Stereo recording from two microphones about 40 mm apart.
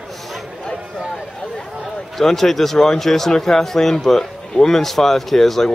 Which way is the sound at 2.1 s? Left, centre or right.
Centre.